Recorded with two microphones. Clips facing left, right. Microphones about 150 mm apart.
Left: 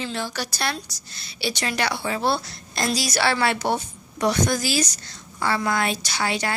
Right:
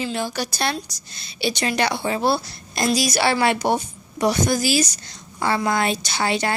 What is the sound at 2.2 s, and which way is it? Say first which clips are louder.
A woman's voice: right 3 dB; 10° right (ahead or behind).